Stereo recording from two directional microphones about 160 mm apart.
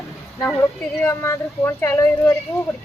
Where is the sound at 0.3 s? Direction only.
10° left (ahead or behind).